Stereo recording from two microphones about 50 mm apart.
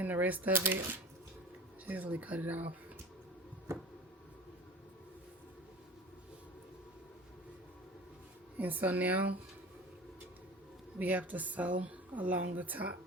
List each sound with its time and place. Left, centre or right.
0.0 s speech: right
0.5 s speech: right
1.9 s speech: right
8.5 s speech: right
10.9 s speech: right